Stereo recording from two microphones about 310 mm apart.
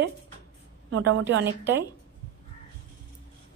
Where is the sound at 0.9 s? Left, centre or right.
Right.